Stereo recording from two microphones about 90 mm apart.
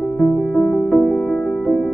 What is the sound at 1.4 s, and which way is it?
Music, 5° right (ahead or behind).